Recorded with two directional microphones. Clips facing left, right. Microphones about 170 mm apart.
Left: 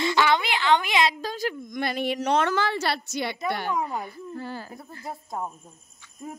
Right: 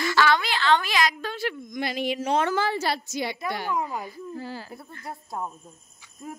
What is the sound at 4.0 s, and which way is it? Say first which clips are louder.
Speech: even; 55° left (ahead or behind).